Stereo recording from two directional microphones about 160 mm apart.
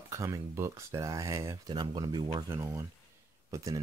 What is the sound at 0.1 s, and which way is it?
Speech, 20° right (ahead or behind).